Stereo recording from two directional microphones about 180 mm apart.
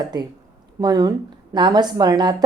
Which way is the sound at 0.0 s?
25° right (ahead or behind).